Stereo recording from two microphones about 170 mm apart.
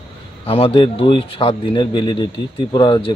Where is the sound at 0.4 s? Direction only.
35° left (ahead or behind).